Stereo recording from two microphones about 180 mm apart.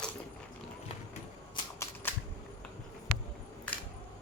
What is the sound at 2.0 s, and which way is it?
Camera, 10° left (ahead or behind).